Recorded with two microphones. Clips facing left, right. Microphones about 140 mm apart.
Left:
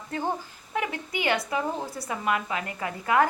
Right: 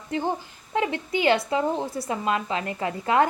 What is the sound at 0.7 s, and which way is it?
A woman's voice, 25° right (ahead or behind).